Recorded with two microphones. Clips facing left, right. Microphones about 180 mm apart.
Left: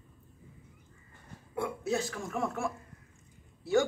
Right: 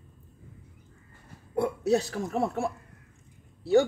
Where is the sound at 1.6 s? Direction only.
40° right (ahead or behind).